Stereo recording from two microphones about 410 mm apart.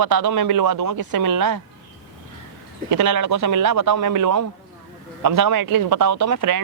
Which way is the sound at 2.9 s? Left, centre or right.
Right.